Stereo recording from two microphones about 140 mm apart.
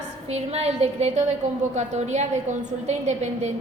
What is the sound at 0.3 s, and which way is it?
A woman's voice, 50° right (ahead or behind).